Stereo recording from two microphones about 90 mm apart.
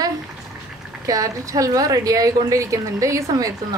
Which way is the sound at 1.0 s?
40° right (ahead or behind).